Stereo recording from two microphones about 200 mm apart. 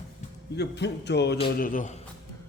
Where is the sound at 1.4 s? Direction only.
45° left (ahead or behind).